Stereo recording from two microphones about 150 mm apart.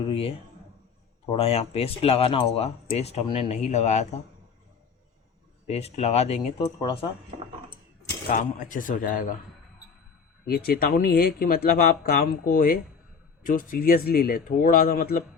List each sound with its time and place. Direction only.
0.1 s speech: 40° left (ahead or behind)
3.2 s speech: 35° left (ahead or behind)
3.5 s speech: 50° left (ahead or behind)
5.6 s speech: 45° left (ahead or behind)
6.7 s speech: 25° left (ahead or behind)
8.3 s speech: 60° left (ahead or behind)
10.4 s speech: 90° left; by 15.2 s 70° left (ahead or behind)